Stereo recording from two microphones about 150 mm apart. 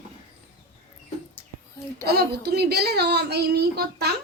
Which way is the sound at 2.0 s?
90° right.